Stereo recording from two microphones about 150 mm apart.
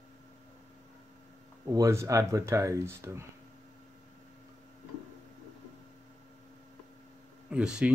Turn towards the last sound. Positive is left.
turn(degrees=-5)  # may be behind; listen again after turning